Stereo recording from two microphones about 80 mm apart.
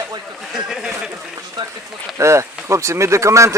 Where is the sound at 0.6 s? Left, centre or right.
Centre.